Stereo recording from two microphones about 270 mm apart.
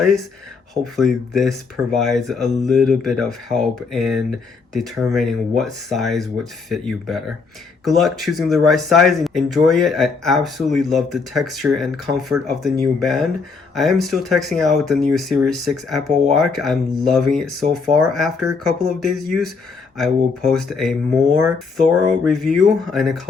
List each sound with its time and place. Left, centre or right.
0.0 s speech: centre
22.2 s speech: centre